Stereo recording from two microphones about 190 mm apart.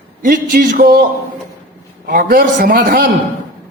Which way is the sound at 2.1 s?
50° right (ahead or behind).